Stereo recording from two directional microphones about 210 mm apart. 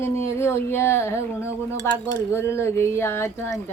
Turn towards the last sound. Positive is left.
turn(degrees=15)  # may be behind; listen again after turning